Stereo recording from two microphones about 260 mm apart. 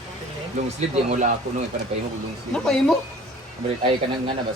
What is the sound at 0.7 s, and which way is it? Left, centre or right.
Speech, right.